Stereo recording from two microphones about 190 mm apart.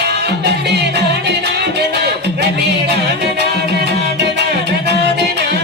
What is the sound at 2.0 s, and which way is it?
Music, 60° right (ahead or behind).